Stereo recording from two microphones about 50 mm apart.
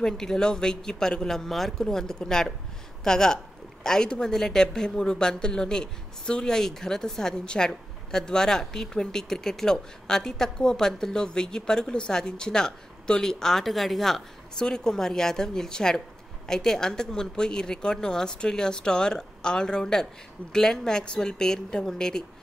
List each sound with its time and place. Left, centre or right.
0.0 s speech: centre